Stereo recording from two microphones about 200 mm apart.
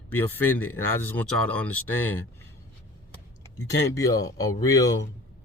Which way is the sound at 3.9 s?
15° left (ahead or behind).